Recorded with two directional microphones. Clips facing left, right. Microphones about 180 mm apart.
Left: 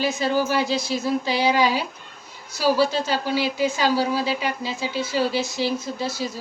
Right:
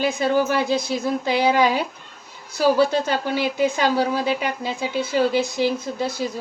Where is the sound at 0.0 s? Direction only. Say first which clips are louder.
Right 2 dB; 55° right (ahead or behind).